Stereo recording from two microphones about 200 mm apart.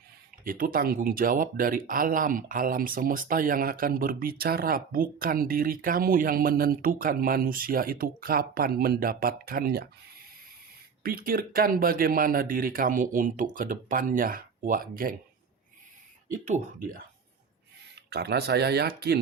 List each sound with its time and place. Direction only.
0.4 s speech: 45° right (ahead or behind)
11.0 s speech: 45° right (ahead or behind)
16.3 s speech: 40° right (ahead or behind)
18.1 s speech: 55° right (ahead or behind)